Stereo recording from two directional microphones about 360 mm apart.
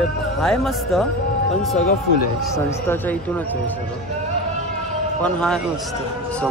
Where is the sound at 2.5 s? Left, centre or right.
Centre.